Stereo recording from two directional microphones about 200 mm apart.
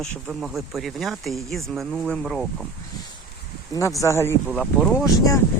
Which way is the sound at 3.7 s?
15° left (ahead or behind).